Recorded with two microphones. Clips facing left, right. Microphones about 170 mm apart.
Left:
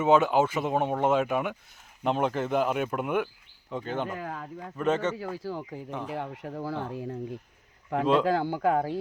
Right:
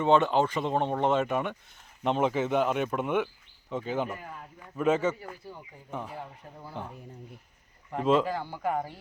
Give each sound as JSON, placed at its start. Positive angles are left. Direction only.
{"t": 0.0, "sound": "speech", "side_deg": 5}
{"t": 4.2, "sound": "speech", "side_deg": 90}
{"t": 4.8, "sound": "speech", "side_deg": -5}
{"t": 5.1, "sound": "speech", "side_deg": 90}